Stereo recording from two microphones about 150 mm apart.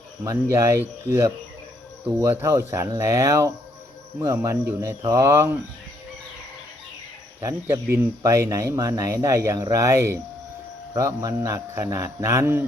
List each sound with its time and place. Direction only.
0.3 s speech: 20° right (ahead or behind)
7.4 s speech: 15° right (ahead or behind)